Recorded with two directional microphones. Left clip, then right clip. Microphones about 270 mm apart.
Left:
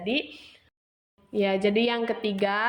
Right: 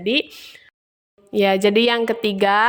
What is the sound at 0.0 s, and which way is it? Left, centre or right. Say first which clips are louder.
A woman's voice: right 8 dB; right.